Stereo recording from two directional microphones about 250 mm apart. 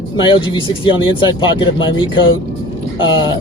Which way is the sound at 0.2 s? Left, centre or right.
Centre.